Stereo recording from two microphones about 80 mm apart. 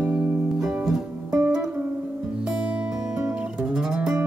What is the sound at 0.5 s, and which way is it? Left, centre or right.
Music, centre.